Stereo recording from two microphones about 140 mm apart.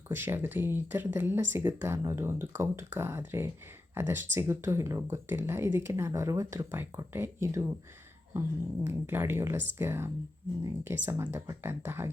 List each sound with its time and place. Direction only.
0.1 s speech: 15° right (ahead or behind)
8.8 s speech: 15° right (ahead or behind)